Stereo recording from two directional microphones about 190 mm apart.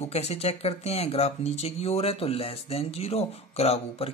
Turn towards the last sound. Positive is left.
turn(degrees=30)  # may be behind; listen again after turning